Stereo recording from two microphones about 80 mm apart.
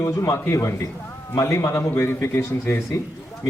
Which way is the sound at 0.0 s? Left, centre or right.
Left.